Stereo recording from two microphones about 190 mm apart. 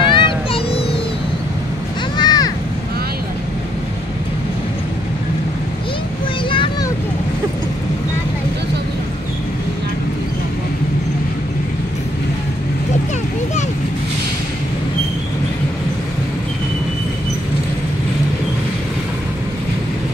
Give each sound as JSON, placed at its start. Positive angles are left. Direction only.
{"t": 0.0, "sound": "vehicle", "side_deg": 25}
{"t": 2.1, "sound": "a sound", "side_deg": 20}
{"t": 6.5, "sound": "vehicle", "side_deg": 25}